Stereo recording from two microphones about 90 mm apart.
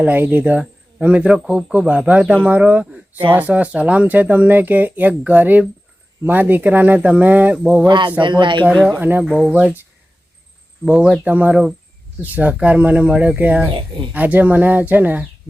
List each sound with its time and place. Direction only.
0.0 s speech: 20° right (ahead or behind)
7.9 s speech: 60° right (ahead or behind)
9.0 s speech: 20° right (ahead or behind)
10.8 s speech: 10° right (ahead or behind)
13.7 s speech: 70° right (ahead or behind)
14.1 s speech: 15° right (ahead or behind)